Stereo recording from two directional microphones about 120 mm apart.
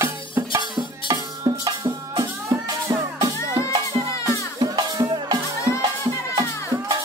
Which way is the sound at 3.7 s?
55° right (ahead or behind).